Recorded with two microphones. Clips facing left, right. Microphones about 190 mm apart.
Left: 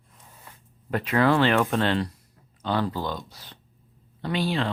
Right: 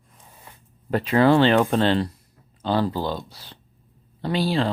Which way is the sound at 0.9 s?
30° right (ahead or behind).